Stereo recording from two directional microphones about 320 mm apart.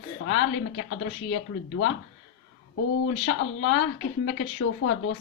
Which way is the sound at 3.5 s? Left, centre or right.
Left.